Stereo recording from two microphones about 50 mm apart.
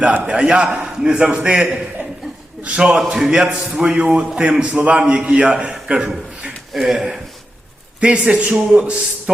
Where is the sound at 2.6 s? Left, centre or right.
Centre.